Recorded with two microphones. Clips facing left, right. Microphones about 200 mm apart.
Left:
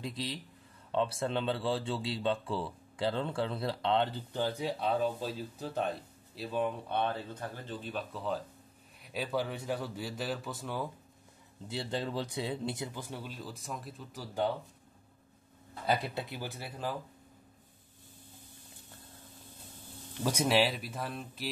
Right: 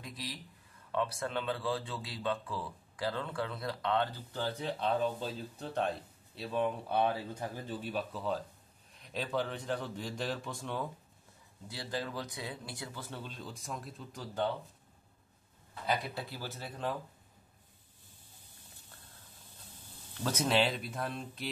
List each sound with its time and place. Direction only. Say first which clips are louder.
0.0 s speech: left 6 dB; 25° left (ahead or behind); by 10.9 s 5° left (ahead or behind)
11.6 s speech: left 3 dB; 25° left (ahead or behind); by 14.2 s centre (ahead or behind)
15.9 s speech: left 3 dB; 20° left (ahead or behind)
20.2 s speech: left 2 dB; 10° left (ahead or behind)